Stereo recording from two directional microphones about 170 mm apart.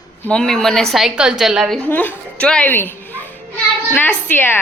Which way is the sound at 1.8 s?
10° left (ahead or behind).